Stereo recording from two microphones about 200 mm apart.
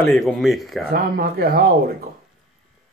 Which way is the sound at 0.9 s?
45° right (ahead or behind).